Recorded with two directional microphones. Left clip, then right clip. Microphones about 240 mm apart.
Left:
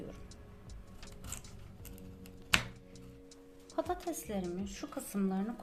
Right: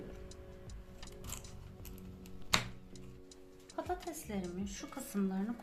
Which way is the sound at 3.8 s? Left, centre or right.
Left.